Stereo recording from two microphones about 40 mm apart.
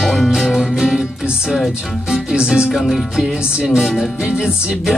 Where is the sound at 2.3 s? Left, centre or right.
Right.